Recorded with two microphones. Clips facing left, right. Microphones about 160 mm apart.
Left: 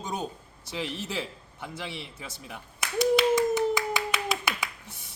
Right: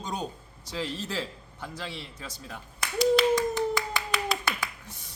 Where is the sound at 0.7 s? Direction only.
15° left (ahead or behind).